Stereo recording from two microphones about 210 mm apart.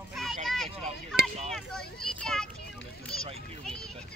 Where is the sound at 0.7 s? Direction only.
30° right (ahead or behind).